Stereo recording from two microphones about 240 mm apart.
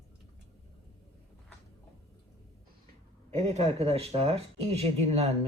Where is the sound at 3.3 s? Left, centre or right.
Right.